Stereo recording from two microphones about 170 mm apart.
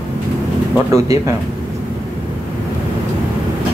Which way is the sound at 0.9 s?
20° right (ahead or behind).